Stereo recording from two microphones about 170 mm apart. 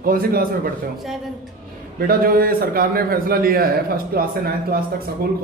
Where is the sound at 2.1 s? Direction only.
60° right (ahead or behind).